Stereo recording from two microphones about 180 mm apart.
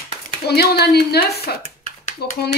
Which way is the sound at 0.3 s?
60° left (ahead or behind).